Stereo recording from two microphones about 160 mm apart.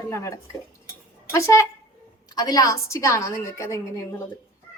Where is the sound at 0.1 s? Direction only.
15° left (ahead or behind).